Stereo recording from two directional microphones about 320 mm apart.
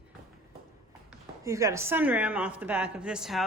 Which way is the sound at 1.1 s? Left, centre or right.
Centre.